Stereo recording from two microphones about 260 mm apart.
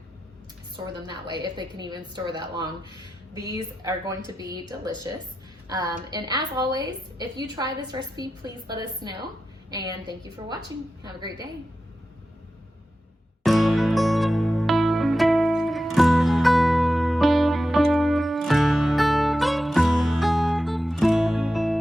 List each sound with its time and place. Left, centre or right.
1.0 s a woman's voice: centre
5.6 s a woman's voice: centre
11.0 s a woman's voice: centre
13.4 s music: centre